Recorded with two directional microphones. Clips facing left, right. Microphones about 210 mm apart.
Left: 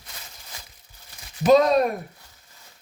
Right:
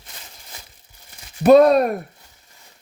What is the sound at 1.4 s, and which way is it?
Speech, 60° right (ahead or behind).